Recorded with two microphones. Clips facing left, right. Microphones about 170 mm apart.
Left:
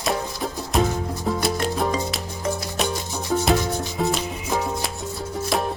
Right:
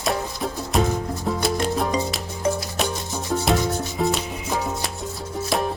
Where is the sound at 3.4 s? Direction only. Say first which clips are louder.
Right 1 dB; centre (ahead or behind).